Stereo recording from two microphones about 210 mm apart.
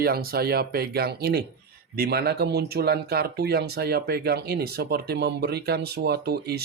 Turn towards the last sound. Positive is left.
turn(degrees=-50)  # may be behind; listen again after turning